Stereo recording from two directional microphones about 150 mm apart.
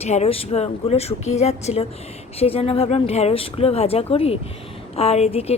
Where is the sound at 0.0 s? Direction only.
45° left (ahead or behind).